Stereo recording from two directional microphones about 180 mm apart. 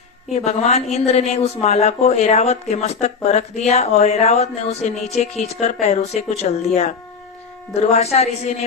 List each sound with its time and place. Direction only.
0.3 s speech: 40° left (ahead or behind)
7.7 s speech: 35° left (ahead or behind)